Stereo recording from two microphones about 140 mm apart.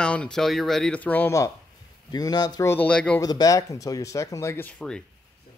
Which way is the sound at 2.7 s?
10° left (ahead or behind).